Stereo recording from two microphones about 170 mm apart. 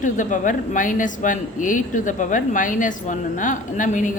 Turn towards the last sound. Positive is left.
turn(degrees=50)  # may be behind; listen again after turning